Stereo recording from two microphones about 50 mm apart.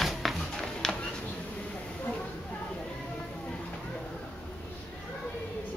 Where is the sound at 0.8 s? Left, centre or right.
Centre.